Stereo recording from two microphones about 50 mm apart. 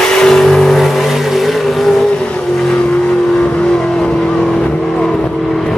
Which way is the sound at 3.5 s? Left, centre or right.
Centre.